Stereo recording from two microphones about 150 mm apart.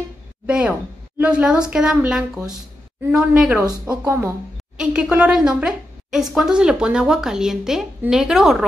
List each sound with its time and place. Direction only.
0.5 s a woman's voice: 10° right (ahead or behind)